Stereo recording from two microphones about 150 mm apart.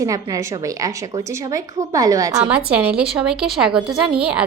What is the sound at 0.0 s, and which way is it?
A woman's voice, 20° right (ahead or behind).